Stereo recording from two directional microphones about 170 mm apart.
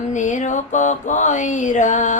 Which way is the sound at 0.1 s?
45° left (ahead or behind).